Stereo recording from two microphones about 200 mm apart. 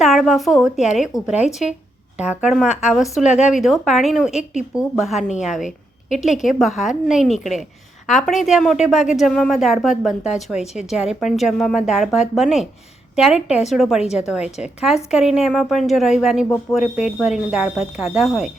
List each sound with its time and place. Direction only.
0.0 s a woman's voice: centre (ahead or behind)
1.1 s speech: 20° left (ahead or behind)
1.5 s a woman's voice: centre (ahead or behind)